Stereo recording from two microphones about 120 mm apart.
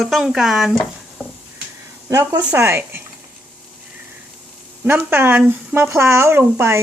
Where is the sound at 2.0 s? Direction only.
30° right (ahead or behind).